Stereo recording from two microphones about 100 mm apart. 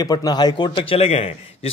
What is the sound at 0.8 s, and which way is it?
Speech, 75° left (ahead or behind).